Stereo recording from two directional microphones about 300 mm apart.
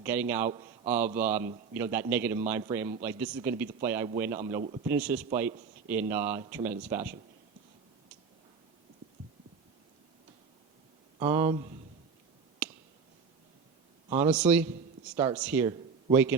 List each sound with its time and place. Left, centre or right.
0.0 s a man's voice: centre
4.6 s a man's voice: right
4.9 s a man's voice: centre
11.2 s a man's voice: centre
12.6 s a sound: centre
14.2 s a man's voice: centre